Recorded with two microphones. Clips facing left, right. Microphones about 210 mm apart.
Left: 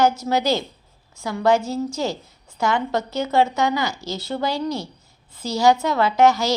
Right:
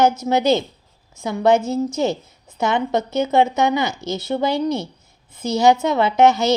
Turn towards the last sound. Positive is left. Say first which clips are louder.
# right 2 dB
turn(degrees=-20)  # may be behind; listen again after turning